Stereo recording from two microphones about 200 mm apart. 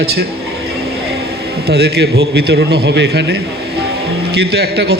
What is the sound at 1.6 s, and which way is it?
A man's voice, 55° right (ahead or behind).